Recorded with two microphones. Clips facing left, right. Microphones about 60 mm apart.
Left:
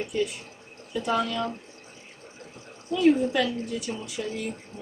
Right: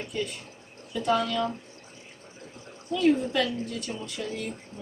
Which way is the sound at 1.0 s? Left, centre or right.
Centre.